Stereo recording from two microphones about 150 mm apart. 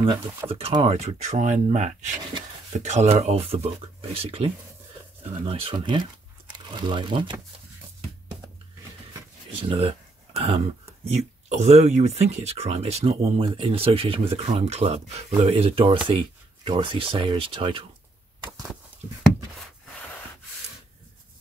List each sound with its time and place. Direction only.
0.5 s speech: 40° right (ahead or behind)
9.5 s speech: 40° right (ahead or behind)